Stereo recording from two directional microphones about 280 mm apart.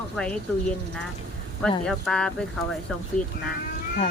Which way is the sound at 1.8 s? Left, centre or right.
Centre.